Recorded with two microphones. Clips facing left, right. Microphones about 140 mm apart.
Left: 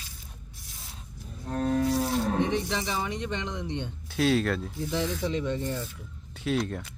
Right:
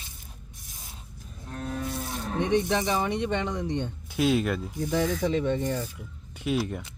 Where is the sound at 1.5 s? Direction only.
50° left (ahead or behind).